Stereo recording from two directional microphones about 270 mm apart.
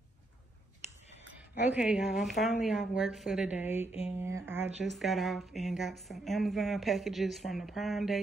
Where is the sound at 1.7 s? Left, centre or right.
Centre.